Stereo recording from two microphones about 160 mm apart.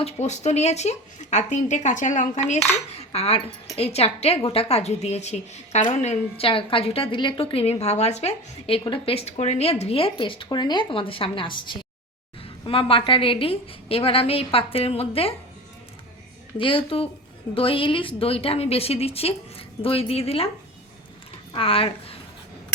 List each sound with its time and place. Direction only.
0.0 s a woman's voice: 45° left (ahead or behind)
16.6 s a woman's voice: 35° left (ahead or behind)
21.5 s a woman's voice: 35° left (ahead or behind)